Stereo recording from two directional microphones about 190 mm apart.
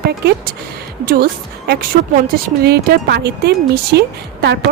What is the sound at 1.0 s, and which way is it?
Speech, 50° right (ahead or behind).